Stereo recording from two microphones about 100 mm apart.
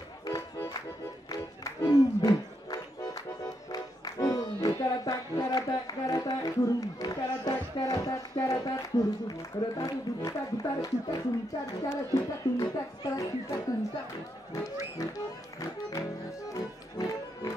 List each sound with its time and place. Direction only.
1.3 s music: 40° left (ahead or behind)
17.1 s music: 40° left (ahead or behind)